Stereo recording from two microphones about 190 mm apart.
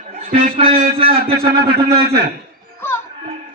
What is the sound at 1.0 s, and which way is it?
A man's voice, 50° right (ahead or behind).